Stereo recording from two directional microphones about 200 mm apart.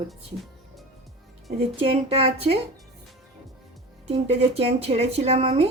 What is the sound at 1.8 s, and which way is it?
Speech, 30° right (ahead or behind).